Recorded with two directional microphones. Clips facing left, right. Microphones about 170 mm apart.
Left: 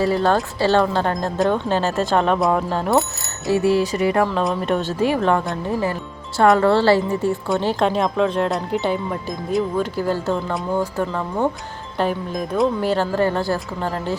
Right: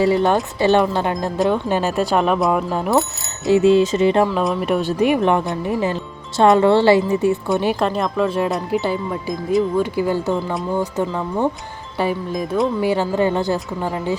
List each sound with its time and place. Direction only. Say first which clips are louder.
0.0 s speech: right 2 dB; 15° right (ahead or behind)
3.5 s speech: right 4 dB; 20° right (ahead or behind)
4.3 s speech: right 1 dB; 5° right (ahead or behind)
7.8 s speech: left 1 dB; centre (ahead or behind)
9.7 s speech: right 3 dB; 10° right (ahead or behind)
11.9 s speech: right 1 dB; 5° right (ahead or behind)
12.8 s speech: right 1 dB; 15° right (ahead or behind)